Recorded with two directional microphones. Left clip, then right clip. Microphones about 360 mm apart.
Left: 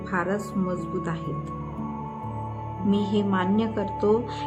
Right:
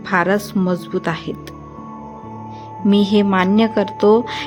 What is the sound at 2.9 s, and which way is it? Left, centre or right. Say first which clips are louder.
A woman's voice: right 10 dB; centre.